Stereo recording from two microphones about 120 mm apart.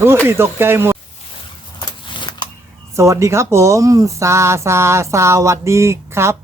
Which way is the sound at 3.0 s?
25° right (ahead or behind).